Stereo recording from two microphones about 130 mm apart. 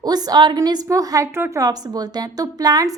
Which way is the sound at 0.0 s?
30° right (ahead or behind).